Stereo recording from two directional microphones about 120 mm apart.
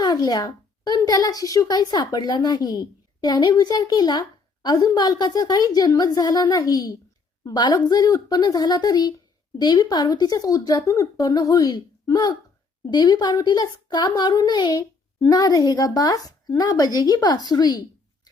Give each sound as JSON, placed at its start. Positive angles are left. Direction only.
{"t": 0.0, "sound": "a woman's voice", "side_deg": 35}